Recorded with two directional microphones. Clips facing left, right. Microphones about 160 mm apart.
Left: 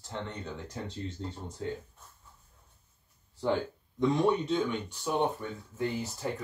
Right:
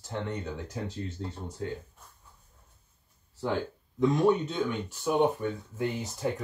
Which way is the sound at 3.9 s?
5° right (ahead or behind).